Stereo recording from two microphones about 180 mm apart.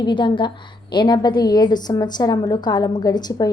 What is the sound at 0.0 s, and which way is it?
A woman's voice, 25° left (ahead or behind).